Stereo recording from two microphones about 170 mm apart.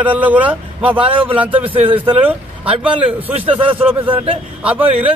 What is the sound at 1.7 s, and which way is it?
Speech, 30° right (ahead or behind).